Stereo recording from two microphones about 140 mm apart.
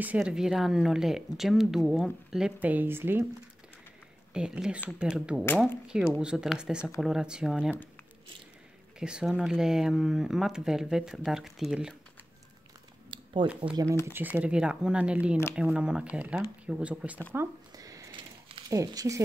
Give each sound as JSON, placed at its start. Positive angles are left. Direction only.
{"t": 0.0, "sound": "speech", "side_deg": -10}
{"t": 4.3, "sound": "speech", "side_deg": -5}
{"t": 9.0, "sound": "speech", "side_deg": -5}
{"t": 13.1, "sound": "a sound", "side_deg": -35}
{"t": 13.6, "sound": "speech", "side_deg": -35}
{"t": 14.0, "sound": "speech", "side_deg": -15}
{"t": 17.3, "sound": "a sound", "side_deg": -20}
{"t": 18.7, "sound": "speech", "side_deg": -25}